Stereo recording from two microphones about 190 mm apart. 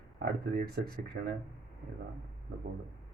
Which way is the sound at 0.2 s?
55° right (ahead or behind).